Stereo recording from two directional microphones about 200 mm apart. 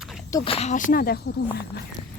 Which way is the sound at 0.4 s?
30° left (ahead or behind).